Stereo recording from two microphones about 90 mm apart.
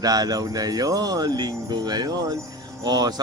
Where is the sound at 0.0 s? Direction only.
45° right (ahead or behind).